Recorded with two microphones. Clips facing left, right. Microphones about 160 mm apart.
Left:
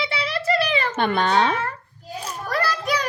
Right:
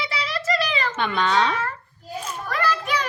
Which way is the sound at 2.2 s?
40° left (ahead or behind).